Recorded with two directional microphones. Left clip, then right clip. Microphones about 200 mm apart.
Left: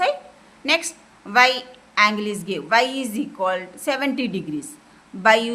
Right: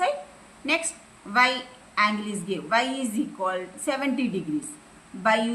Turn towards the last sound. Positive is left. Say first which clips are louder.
# left 6 dB
turn(degrees=55)  # may be behind; listen again after turning